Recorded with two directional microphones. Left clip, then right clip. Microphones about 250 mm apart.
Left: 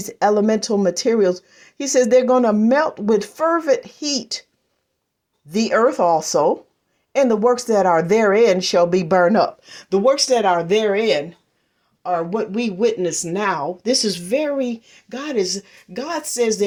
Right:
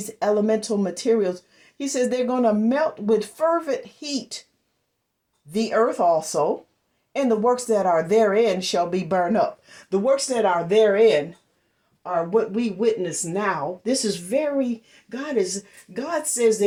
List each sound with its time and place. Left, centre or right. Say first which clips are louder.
0.2 s speech: left 4 dB; left
5.5 s speech: left 4 dB; left